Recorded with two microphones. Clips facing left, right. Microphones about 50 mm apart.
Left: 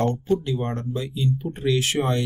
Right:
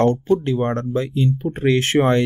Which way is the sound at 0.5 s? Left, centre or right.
Right.